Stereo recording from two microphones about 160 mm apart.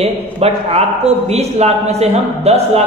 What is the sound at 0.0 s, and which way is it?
A man's voice, 40° right (ahead or behind).